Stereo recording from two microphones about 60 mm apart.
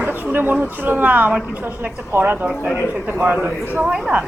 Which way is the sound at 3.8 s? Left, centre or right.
Centre.